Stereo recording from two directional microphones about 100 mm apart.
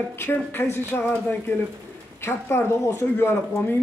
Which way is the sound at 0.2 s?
20° left (ahead or behind).